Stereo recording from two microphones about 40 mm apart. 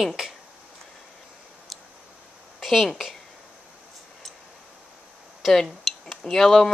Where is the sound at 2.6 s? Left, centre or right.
Centre.